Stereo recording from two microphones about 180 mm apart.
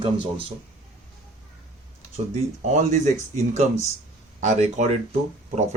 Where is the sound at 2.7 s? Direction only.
40° right (ahead or behind).